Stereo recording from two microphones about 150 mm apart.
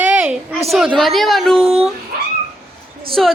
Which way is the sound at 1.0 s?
Centre (ahead or behind).